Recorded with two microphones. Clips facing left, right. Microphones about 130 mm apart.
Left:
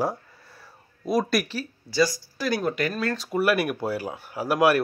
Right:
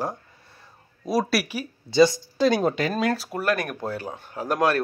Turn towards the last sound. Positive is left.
turn(degrees=10)  # may be behind; listen again after turning